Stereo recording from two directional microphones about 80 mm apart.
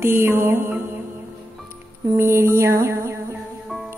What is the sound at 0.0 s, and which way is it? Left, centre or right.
Speech, right.